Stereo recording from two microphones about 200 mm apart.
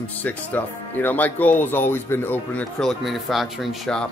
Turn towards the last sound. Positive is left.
turn(degrees=0)  # may be behind; listen again after turning